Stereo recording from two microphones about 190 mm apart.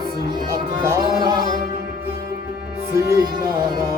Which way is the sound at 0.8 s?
20° right (ahead or behind).